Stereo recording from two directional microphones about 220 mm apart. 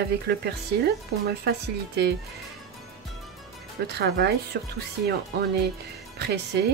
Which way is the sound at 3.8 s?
50° right (ahead or behind).